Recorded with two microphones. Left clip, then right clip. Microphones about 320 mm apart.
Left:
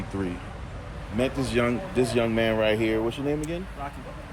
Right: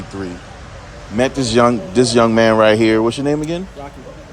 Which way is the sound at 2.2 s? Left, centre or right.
Right.